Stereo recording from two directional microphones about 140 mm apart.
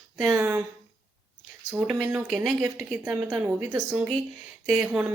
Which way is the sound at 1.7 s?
10° right (ahead or behind).